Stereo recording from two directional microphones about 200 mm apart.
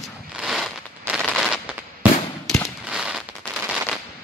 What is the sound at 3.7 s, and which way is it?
Fireworks, 5° right (ahead or behind).